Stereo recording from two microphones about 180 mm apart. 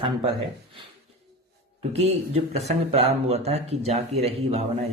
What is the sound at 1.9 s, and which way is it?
A man's voice, 35° right (ahead or behind).